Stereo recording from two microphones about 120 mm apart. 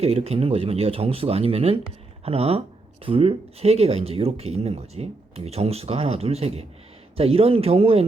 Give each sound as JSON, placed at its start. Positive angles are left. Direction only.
{"t": 0.0, "sound": "speech", "side_deg": -60}